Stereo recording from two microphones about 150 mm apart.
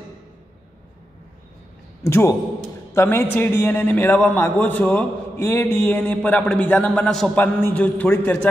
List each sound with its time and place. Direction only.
2.0 s a man's voice: 15° left (ahead or behind)